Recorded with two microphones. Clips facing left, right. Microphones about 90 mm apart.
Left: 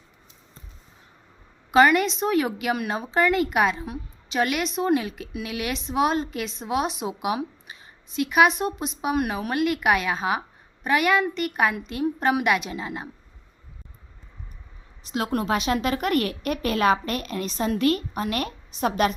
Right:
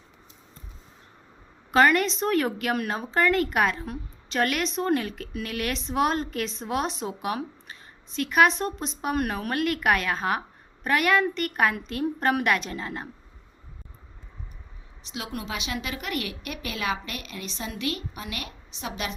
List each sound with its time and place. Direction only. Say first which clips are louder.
1.7 s a woman's voice: left 2 dB; 5° left (ahead or behind)
15.0 s speech: left 9 dB; 45° left (ahead or behind)